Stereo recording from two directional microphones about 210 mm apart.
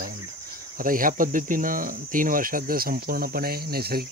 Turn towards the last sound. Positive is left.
turn(degrees=-45)  # may be behind; listen again after turning